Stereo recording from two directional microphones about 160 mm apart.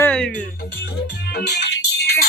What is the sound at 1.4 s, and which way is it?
Music, 90° left.